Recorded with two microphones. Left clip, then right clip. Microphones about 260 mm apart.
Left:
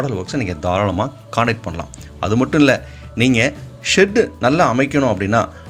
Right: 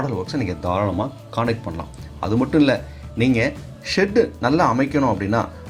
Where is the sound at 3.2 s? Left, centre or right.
Left.